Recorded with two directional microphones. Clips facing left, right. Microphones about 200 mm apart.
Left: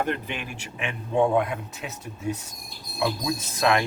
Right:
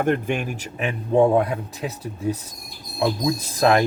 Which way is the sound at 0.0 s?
50° right (ahead or behind).